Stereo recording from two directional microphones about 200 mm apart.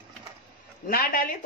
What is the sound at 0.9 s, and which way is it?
Speech, 45° left (ahead or behind).